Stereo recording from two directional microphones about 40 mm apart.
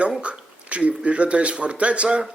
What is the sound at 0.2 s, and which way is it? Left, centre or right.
Speech, right.